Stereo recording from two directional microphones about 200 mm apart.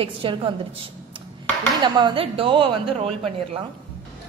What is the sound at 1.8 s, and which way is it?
A woman's voice, 20° right (ahead or behind).